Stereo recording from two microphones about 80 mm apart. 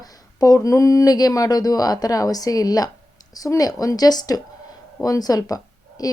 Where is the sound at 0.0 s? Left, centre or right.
Left.